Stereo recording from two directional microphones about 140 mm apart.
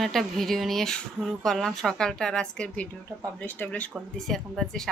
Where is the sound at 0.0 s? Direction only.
Centre (ahead or behind).